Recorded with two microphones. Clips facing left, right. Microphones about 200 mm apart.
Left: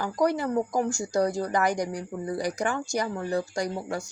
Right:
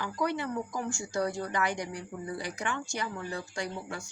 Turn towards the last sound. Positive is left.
turn(degrees=40)  # may be behind; listen again after turning